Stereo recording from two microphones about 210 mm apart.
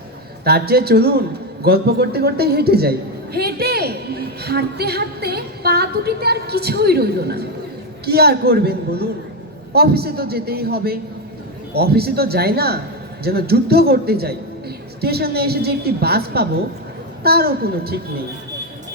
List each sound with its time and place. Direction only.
0.4 s a woman's voice: 50° right (ahead or behind)